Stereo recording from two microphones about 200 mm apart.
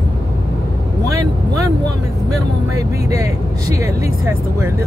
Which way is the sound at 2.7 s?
15° right (ahead or behind).